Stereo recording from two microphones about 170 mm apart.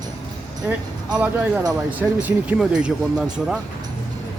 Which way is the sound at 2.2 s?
10° right (ahead or behind).